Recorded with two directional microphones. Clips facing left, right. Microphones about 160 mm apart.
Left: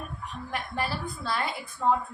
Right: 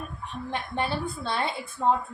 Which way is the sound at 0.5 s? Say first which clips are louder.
Right 2 dB; 25° right (ahead or behind).